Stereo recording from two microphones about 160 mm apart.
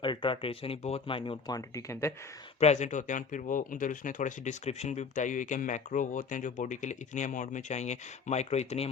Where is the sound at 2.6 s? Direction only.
45° left (ahead or behind).